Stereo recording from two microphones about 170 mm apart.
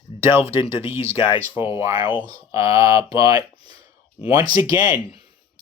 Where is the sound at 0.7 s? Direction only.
15° right (ahead or behind).